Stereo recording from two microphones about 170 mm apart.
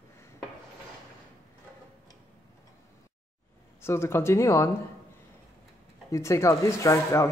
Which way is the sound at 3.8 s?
15° left (ahead or behind).